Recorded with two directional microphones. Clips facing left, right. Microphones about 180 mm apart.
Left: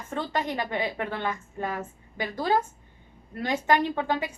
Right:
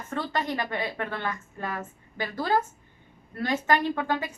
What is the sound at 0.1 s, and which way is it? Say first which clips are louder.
Speech: even; 15° left (ahead or behind).